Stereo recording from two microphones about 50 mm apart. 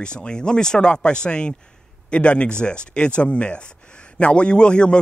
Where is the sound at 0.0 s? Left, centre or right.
Centre.